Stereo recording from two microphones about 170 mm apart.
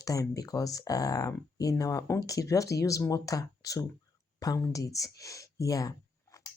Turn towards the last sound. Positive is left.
turn(degrees=20)  # may be behind; listen again after turning